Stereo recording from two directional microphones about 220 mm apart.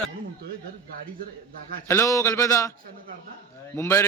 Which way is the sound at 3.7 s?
10° left (ahead or behind).